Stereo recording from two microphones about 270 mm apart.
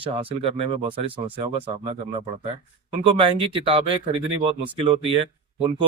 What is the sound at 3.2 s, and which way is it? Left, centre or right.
Speech, centre.